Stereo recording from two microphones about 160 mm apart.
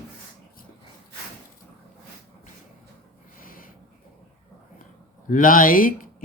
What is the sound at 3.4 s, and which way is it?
Snort, 60° left (ahead or behind).